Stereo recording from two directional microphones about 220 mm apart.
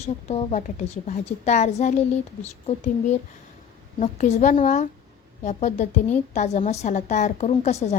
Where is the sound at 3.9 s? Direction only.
35° left (ahead or behind).